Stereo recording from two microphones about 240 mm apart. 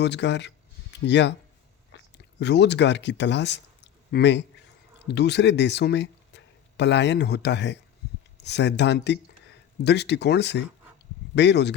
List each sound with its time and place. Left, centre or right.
0.0 s speech: left
1.9 s chewing: left
2.4 s speech: left